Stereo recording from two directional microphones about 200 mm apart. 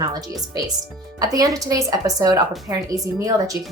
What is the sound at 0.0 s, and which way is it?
A woman's voice, 20° right (ahead or behind).